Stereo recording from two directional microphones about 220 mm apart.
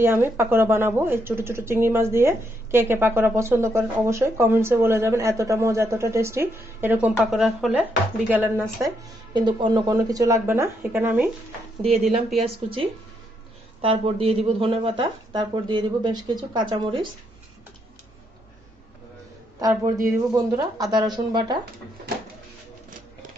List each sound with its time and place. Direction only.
0.0 s a woman's voice: 10° right (ahead or behind)
9.3 s a woman's voice: 20° right (ahead or behind)
12.4 s speech: 25° right (ahead or behind)
19.6 s a woman's voice: 15° right (ahead or behind)